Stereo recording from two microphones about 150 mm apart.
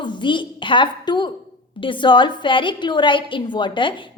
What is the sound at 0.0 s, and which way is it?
A woman's voice, 30° left (ahead or behind).